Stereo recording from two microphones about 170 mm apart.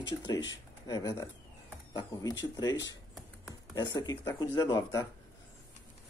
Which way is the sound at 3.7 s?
25° left (ahead or behind).